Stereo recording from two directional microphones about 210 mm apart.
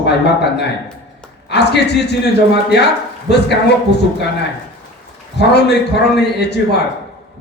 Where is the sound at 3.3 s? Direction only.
50° left (ahead or behind).